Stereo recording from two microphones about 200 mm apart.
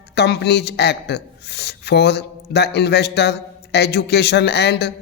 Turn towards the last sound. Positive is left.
turn(degrees=55)  # may be behind; listen again after turning